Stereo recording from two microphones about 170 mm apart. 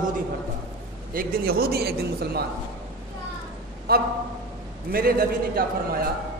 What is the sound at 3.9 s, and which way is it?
A man's voice, 65° right (ahead or behind).